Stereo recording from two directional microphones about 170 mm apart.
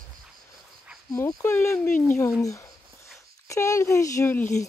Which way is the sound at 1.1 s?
20° left (ahead or behind).